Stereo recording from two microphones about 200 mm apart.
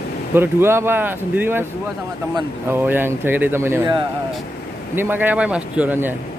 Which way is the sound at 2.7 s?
10° right (ahead or behind).